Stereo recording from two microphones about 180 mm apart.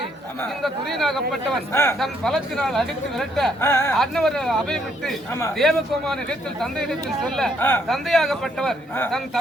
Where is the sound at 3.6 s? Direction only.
15° left (ahead or behind).